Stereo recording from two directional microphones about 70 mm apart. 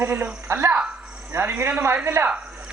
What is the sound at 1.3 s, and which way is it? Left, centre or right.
Speech, right.